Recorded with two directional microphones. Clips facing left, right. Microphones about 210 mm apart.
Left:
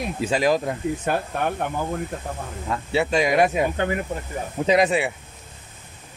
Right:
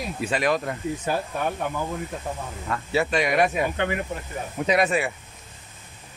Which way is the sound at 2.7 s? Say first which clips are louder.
Left 2 dB; 30° left (ahead or behind).